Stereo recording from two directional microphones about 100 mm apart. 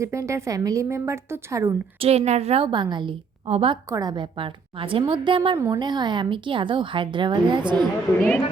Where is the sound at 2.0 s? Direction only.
90° right.